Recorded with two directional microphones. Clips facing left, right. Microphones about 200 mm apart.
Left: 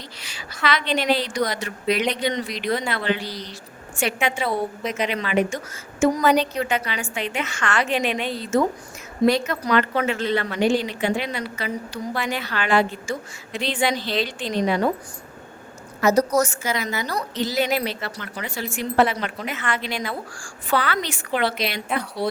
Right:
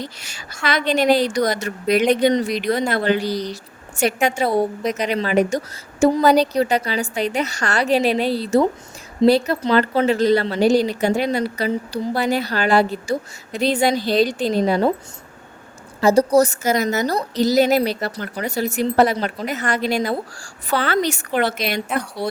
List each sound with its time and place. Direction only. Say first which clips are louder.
0.0 s a woman's voice: right 7 dB; 45° right (ahead or behind)
16.0 s a woman's voice: right 4 dB; 30° right (ahead or behind); by 21.8 s 45° right (ahead or behind)